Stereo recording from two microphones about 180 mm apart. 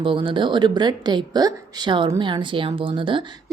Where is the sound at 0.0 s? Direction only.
30° right (ahead or behind).